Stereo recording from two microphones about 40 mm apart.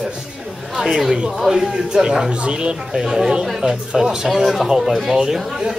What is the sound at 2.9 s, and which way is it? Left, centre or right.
Speech, centre.